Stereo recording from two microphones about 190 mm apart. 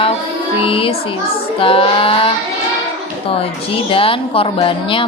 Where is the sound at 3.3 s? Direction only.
30° left (ahead or behind).